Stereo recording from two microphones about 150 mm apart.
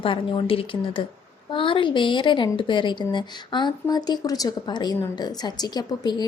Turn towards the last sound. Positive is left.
turn(degrees=25)  # may be behind; listen again after turning